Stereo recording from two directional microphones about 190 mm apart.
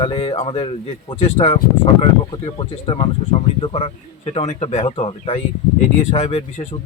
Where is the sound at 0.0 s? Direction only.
30° left (ahead or behind).